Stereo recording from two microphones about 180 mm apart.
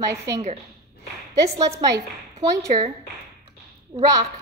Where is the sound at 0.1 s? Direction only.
15° right (ahead or behind).